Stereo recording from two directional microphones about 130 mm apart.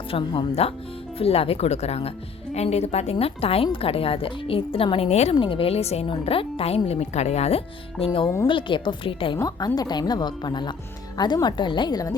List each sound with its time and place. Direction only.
0.1 s a woman's voice: 40° left (ahead or behind)
5.4 s a woman's voice: 40° left (ahead or behind)